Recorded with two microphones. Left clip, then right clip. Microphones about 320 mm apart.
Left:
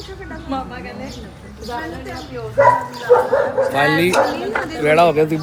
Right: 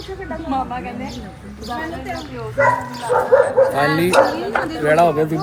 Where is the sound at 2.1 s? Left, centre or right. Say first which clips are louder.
Left 5 dB; left.